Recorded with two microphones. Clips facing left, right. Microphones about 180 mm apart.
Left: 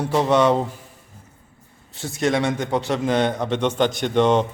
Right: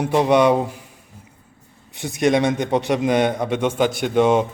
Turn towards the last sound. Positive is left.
turn(degrees=-10)  # may be behind; listen again after turning